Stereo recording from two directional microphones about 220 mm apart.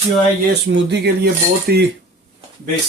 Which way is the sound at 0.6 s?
50° right (ahead or behind).